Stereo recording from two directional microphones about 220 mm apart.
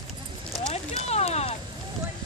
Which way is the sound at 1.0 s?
30° left (ahead or behind).